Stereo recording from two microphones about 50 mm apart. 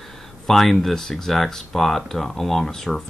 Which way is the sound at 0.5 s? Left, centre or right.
Centre.